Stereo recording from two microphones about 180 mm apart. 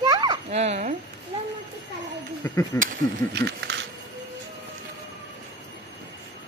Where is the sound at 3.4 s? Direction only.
70° right (ahead or behind).